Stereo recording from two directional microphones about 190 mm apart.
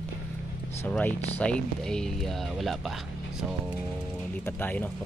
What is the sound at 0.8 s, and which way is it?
Speech, 10° left (ahead or behind).